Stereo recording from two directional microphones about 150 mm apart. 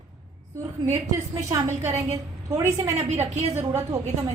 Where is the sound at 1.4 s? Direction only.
20° right (ahead or behind).